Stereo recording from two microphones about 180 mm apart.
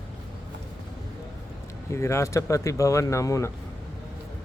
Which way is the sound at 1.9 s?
15° left (ahead or behind).